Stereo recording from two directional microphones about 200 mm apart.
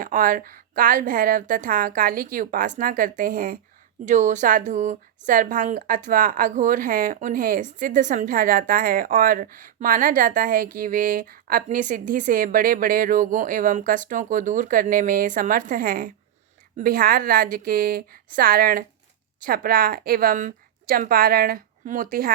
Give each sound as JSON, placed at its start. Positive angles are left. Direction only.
{"t": 0.0, "sound": "speech", "side_deg": -45}